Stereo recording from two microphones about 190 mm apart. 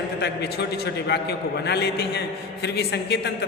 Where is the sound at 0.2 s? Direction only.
60° left (ahead or behind).